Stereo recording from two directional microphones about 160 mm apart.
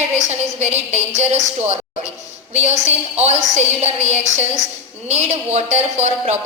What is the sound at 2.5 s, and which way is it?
A woman's voice, 45° right (ahead or behind).